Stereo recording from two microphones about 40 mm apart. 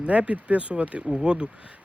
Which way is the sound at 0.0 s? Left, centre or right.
Right.